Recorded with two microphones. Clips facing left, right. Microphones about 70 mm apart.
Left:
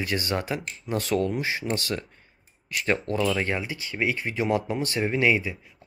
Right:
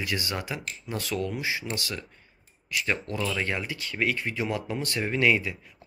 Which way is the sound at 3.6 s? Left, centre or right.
Centre.